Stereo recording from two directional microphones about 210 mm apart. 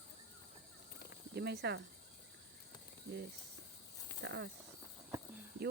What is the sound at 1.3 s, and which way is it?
Speech, 50° right (ahead or behind).